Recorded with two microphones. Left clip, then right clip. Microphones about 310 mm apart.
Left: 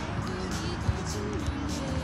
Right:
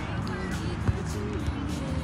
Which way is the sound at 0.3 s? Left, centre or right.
Left.